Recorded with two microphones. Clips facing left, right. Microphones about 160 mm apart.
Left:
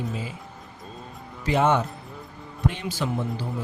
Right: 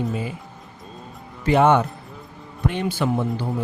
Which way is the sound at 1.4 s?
60° right (ahead or behind).